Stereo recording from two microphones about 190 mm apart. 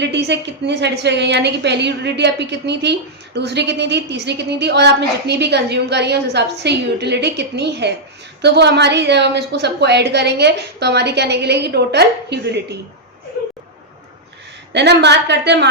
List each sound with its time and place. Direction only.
0.0 s a woman's voice: 65° right (ahead or behind)
14.7 s a woman's voice: 65° right (ahead or behind)